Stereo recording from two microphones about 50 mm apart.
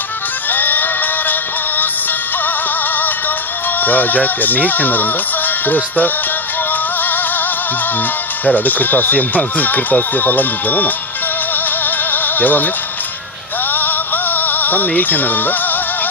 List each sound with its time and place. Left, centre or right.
0.5 s music: left
3.8 s speech: left
8.4 s speech: left
12.1 s music: left
13.7 s music: left